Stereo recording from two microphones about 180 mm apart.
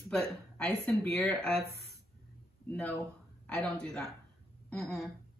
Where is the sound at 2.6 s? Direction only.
10° left (ahead or behind).